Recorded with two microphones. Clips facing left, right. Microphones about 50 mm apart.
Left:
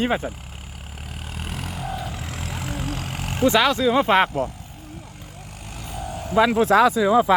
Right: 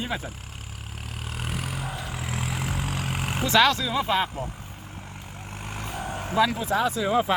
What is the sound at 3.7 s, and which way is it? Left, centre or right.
Speech, left.